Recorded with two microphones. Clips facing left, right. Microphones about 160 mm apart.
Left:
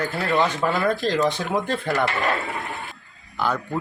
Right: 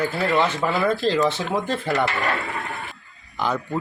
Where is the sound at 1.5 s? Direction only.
Centre (ahead or behind).